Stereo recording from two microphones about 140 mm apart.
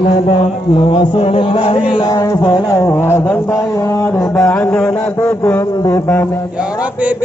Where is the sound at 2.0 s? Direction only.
25° left (ahead or behind).